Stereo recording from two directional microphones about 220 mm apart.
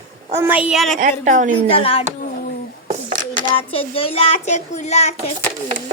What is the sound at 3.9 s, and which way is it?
A child's voice, 25° left (ahead or behind).